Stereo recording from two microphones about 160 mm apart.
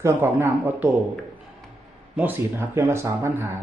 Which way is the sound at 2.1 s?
10° right (ahead or behind).